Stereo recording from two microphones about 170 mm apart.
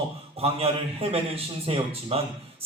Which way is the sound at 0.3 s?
35° right (ahead or behind).